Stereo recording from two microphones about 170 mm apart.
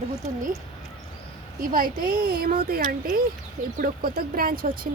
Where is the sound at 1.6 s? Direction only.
55° right (ahead or behind).